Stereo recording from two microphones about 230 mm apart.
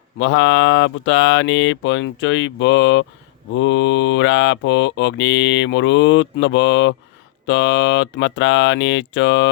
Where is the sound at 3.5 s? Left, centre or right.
Left.